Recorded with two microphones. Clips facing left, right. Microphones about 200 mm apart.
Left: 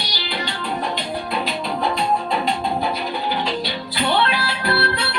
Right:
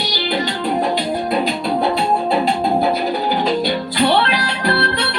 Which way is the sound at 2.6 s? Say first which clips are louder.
Right 6 dB; 45° right (ahead or behind).